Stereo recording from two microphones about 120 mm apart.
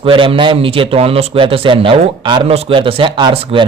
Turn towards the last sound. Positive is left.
turn(degrees=-45)  # may be behind; listen again after turning